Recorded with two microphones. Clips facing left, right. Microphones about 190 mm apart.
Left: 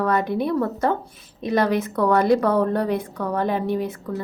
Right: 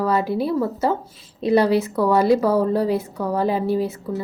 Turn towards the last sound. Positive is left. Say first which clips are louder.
# right 3 dB
turn(degrees=-10)  # may be behind; listen again after turning